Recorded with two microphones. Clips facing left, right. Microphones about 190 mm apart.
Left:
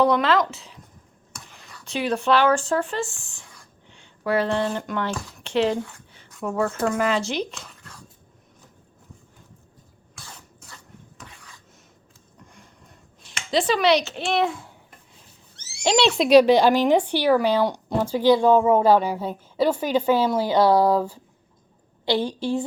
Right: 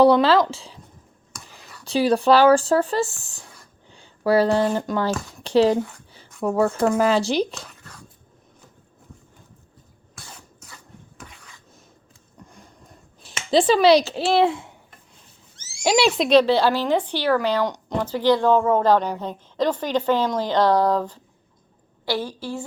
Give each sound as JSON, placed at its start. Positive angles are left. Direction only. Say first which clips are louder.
{"t": 0.0, "sound": "speech", "louder": "right 4 dB", "side_deg": -30}
{"t": 1.3, "sound": "whispering", "louder": "right 1 dB", "side_deg": 0}
{"t": 1.8, "sound": "a woman's voice", "louder": "right 6 dB", "side_deg": -35}
{"t": 13.2, "sound": "speech", "louder": "right 5 dB", "side_deg": -30}
{"t": 15.5, "sound": "a sound", "louder": "left 1 dB", "side_deg": 65}
{"t": 15.8, "sound": "speech", "louder": "right 1 dB", "side_deg": -10}
{"t": 16.3, "sound": "a woman's voice", "louder": "left 3 dB", "side_deg": 15}
{"t": 22.0, "sound": "a woman's voice", "louder": "left 3 dB", "side_deg": 20}